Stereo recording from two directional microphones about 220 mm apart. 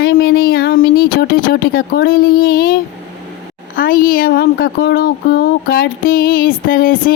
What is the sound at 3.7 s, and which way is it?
Speech, 40° left (ahead or behind).